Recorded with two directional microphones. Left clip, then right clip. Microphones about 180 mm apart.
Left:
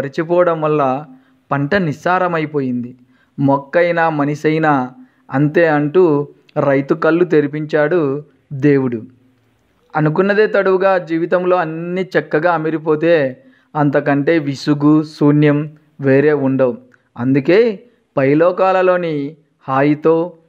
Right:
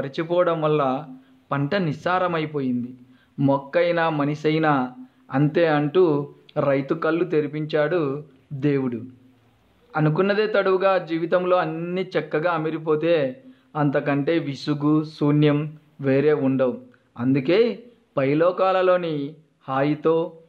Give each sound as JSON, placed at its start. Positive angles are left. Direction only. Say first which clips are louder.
{"t": 0.0, "sound": "speech", "louder": "left 7 dB", "side_deg": 35}